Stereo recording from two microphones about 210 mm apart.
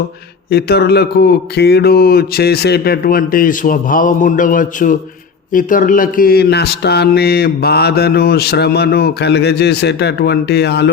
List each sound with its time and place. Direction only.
0.5 s speech: 50° left (ahead or behind)